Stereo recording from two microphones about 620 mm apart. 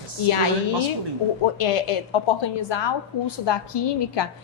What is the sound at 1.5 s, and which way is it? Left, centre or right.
A woman's voice, left.